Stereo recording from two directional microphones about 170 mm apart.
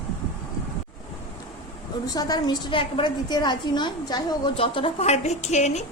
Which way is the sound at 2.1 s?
25° left (ahead or behind).